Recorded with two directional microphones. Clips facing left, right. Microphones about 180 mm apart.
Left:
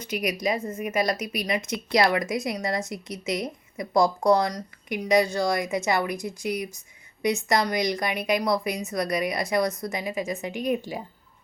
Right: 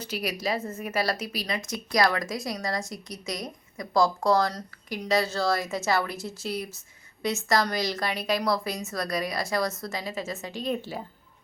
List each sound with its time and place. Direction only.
0.5 s a woman's voice: 10° left (ahead or behind)